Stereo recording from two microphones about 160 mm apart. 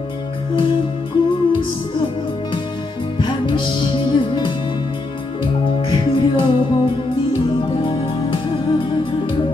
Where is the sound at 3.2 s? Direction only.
30° left (ahead or behind).